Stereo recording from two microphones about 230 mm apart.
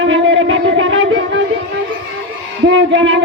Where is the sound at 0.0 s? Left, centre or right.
Right.